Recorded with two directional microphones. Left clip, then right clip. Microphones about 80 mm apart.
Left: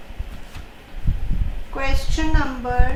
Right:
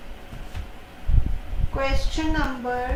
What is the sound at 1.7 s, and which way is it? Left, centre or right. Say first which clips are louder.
A woman's voice: even; left.